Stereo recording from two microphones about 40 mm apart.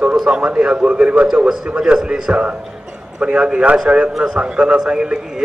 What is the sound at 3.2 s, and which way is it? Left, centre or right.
Speech, right.